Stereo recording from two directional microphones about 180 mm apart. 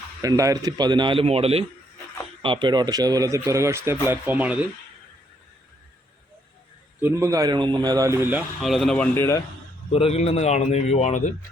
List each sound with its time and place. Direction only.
0.2 s a man's voice: 20° right (ahead or behind)
7.0 s a man's voice: 15° right (ahead or behind); by 9.0 s centre (ahead or behind)
9.1 s a man's voice: 15° left (ahead or behind)
9.9 s a man's voice: 35° left (ahead or behind)